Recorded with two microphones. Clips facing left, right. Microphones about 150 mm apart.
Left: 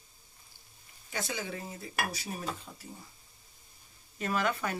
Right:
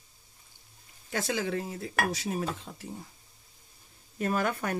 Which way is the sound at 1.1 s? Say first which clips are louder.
Right 6 dB; 90° right.